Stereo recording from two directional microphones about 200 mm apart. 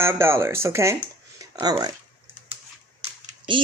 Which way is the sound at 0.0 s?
10° right (ahead or behind).